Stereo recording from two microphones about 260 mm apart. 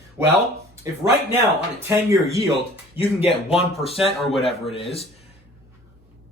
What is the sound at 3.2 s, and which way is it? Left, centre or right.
Speech, left.